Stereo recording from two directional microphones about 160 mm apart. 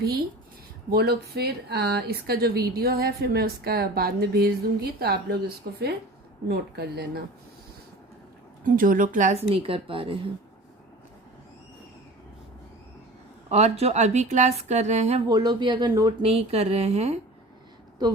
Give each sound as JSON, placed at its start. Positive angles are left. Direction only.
{"t": 0.9, "sound": "speech", "side_deg": -75}
{"t": 6.5, "sound": "a woman's voice", "side_deg": -80}
{"t": 8.6, "sound": "speech", "side_deg": -60}
{"t": 13.5, "sound": "a woman's voice", "side_deg": -45}
{"t": 15.3, "sound": "speech", "side_deg": -25}
{"t": 16.2, "sound": "speech", "side_deg": -40}